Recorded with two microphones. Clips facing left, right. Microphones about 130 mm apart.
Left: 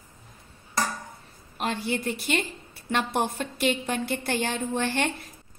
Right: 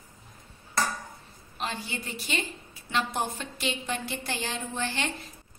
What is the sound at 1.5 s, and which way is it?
A woman's voice, 55° left (ahead or behind).